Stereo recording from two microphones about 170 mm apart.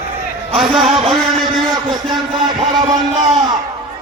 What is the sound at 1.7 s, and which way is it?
Speech, 25° right (ahead or behind).